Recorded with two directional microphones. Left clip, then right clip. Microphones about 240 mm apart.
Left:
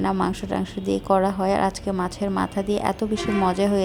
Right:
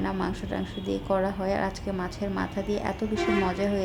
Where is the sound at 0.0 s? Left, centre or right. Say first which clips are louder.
Left 7 dB; left.